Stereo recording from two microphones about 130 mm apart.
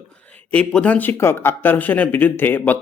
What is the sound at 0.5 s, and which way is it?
Speech, 10° left (ahead or behind).